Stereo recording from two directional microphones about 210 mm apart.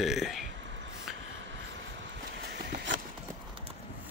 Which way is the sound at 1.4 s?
60° right (ahead or behind).